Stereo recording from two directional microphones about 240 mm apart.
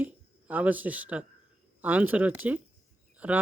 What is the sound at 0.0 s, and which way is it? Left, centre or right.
A man's voice, centre.